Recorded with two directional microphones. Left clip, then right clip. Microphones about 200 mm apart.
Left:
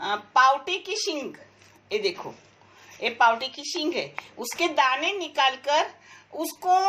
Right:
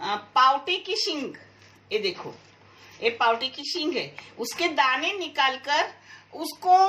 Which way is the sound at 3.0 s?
35° left (ahead or behind).